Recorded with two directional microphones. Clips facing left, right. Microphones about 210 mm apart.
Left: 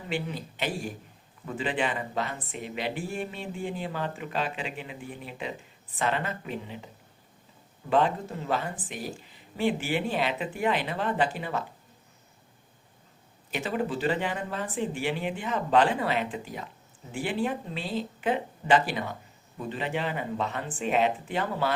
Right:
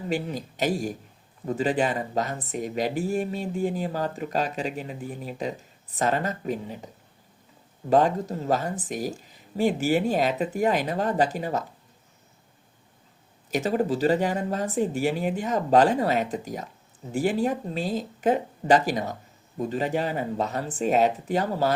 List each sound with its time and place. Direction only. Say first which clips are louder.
0.1 s speech: right 3 dB; 40° right (ahead or behind)
13.5 s speech: right 6 dB; 40° right (ahead or behind)